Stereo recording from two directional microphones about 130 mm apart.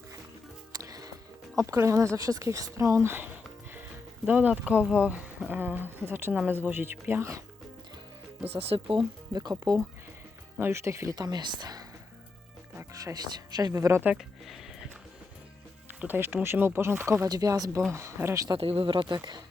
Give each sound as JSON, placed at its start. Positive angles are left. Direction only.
{"t": 0.7, "sound": "music", "side_deg": -30}
{"t": 1.5, "sound": "speech", "side_deg": -20}
{"t": 4.3, "sound": "speech", "side_deg": -15}
{"t": 8.4, "sound": "speech", "side_deg": -45}
{"t": 10.6, "sound": "speech", "side_deg": -20}
{"t": 12.7, "sound": "a sound", "side_deg": -25}
{"t": 15.9, "sound": "speech", "side_deg": -15}
{"t": 17.2, "sound": "speech", "side_deg": -30}
{"t": 18.5, "sound": "speech", "side_deg": -45}